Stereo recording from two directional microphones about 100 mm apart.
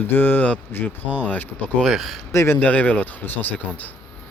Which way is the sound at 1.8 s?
Centre (ahead or behind).